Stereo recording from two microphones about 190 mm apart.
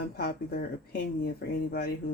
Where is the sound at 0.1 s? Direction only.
55° left (ahead or behind).